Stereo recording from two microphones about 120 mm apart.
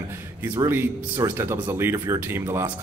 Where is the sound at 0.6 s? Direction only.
20° right (ahead or behind).